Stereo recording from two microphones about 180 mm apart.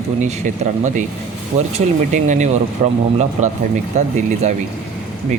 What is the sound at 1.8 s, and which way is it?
Speech, 40° right (ahead or behind).